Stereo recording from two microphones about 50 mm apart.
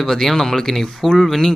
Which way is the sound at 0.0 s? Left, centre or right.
Centre.